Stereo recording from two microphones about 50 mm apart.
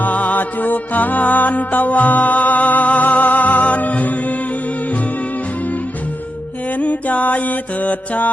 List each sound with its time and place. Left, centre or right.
0.0 s music: left
6.7 s music: left